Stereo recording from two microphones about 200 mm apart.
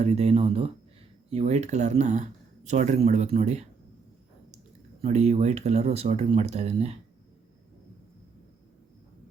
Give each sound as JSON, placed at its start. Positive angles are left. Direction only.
{"t": 0.0, "sound": "speech", "side_deg": -30}
{"t": 5.0, "sound": "speech", "side_deg": -30}